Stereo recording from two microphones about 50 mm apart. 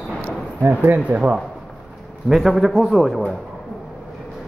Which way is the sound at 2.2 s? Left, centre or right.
Centre.